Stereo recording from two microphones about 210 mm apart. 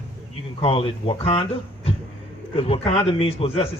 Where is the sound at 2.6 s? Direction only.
25° left (ahead or behind).